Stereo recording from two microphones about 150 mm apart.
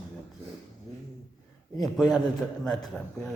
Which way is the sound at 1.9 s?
5° right (ahead or behind).